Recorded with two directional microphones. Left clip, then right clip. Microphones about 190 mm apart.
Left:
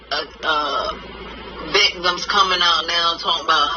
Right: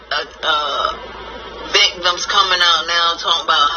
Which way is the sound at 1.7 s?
Centre (ahead or behind).